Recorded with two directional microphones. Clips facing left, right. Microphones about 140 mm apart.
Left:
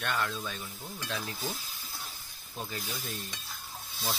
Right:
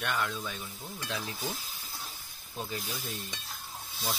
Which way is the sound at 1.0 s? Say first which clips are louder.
Even; 20° right (ahead or behind).